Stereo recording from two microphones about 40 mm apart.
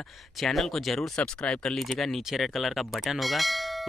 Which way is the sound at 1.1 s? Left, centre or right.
Left.